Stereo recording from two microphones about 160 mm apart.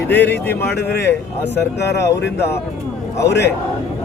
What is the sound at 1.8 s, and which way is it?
Speech, 90° left.